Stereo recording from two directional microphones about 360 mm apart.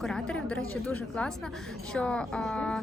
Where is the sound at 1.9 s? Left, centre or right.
Centre.